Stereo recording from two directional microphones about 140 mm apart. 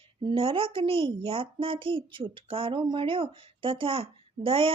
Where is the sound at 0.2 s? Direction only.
35° right (ahead or behind).